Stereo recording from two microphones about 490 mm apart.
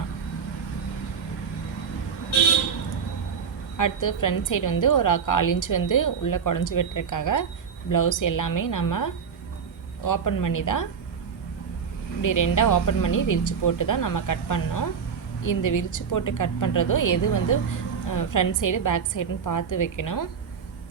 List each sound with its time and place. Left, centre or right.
3.8 s a woman's voice: left
12.2 s a woman's voice: left